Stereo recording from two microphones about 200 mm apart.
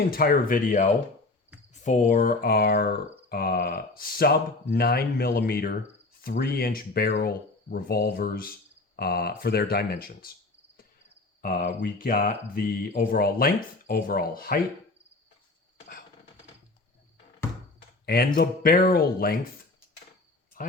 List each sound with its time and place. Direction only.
0.0 s speech: 50° left (ahead or behind)
11.4 s speech: 45° left (ahead or behind)
18.0 s speech: 50° left (ahead or behind)